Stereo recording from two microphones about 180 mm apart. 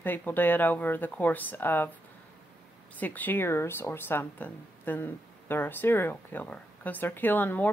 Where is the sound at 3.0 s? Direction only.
10° left (ahead or behind).